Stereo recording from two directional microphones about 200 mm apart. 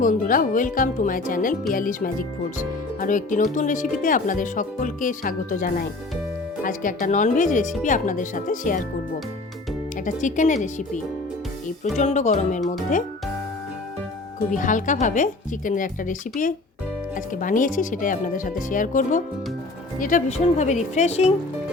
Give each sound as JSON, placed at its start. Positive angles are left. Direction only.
{"t": 0.0, "sound": "speech", "side_deg": 40}
{"t": 10.1, "sound": "speech", "side_deg": 40}
{"t": 14.5, "sound": "speech", "side_deg": 40}